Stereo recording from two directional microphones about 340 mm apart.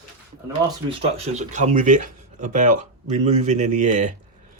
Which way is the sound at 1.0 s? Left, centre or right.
Centre.